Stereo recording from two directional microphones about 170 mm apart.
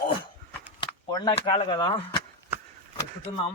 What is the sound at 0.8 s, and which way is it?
Speech, 25° left (ahead or behind).